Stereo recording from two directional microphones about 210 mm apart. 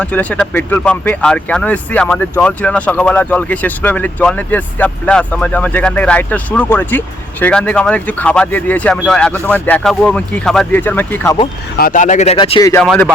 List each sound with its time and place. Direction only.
0.0 s speech: 5° left (ahead or behind)
11.8 s speech: 40° left (ahead or behind); by 12.8 s 20° left (ahead or behind)
12.8 s speech: centre (ahead or behind)